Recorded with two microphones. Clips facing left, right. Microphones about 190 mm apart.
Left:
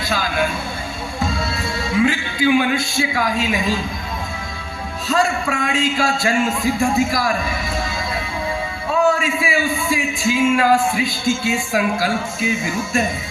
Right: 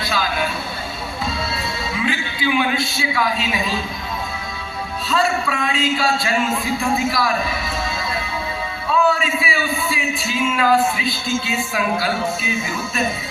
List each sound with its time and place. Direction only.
0.1 s vehicle: 45° left (ahead or behind)
1.2 s music: 45° left (ahead or behind)
2.0 s speech: 45° left (ahead or behind)
5.0 s speech: 45° left (ahead or behind)
8.9 s a sound: 45° left (ahead or behind)
10.5 s speech: 45° left (ahead or behind)